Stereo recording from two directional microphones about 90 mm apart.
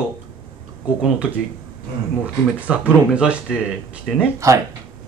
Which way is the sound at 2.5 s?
15° right (ahead or behind).